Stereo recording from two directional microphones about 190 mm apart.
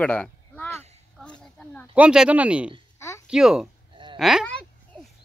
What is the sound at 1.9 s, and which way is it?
Speech, 5° right (ahead or behind).